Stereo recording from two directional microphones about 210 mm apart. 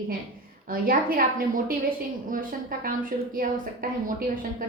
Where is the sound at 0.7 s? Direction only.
45° right (ahead or behind).